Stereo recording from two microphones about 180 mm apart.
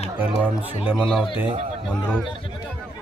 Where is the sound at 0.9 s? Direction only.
Centre (ahead or behind).